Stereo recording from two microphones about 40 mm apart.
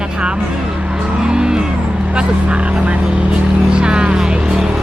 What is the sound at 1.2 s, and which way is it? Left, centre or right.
Music, right.